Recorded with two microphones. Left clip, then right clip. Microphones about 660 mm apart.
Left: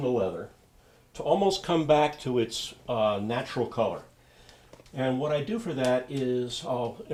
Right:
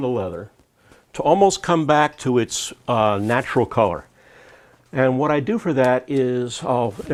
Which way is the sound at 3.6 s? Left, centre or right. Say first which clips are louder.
Right 10 dB; right.